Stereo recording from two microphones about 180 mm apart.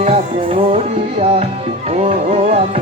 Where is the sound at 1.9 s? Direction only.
40° right (ahead or behind).